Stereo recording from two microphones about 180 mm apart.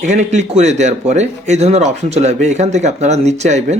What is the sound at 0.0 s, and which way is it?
Speech, 40° right (ahead or behind).